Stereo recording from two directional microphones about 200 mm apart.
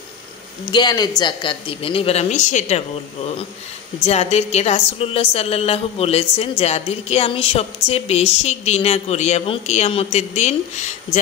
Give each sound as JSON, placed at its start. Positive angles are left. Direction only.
{"t": 0.7, "sound": "speech", "side_deg": 20}
{"t": 4.0, "sound": "a woman's voice", "side_deg": 35}